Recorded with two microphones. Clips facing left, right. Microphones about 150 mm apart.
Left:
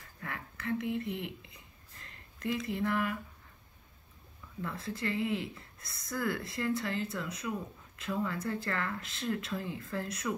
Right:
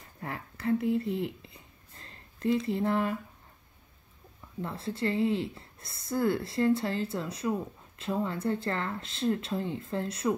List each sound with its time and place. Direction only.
0.2 s speech: 35° right (ahead or behind)
2.0 s a sound: 30° right (ahead or behind)
4.6 s speech: 30° right (ahead or behind)